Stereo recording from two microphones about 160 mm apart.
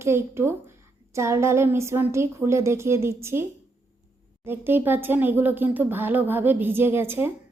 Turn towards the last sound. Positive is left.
turn(degrees=-15)  # may be behind; listen again after turning